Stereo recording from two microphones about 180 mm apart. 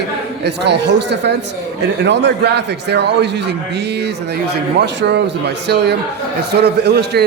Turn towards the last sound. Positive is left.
turn(degrees=-65)  # may be behind; listen again after turning